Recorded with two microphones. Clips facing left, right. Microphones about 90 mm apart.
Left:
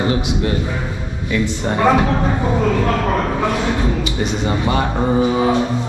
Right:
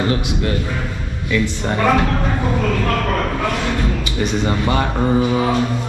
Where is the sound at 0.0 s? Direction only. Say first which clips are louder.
Left 1 dB; 20° left (ahead or behind).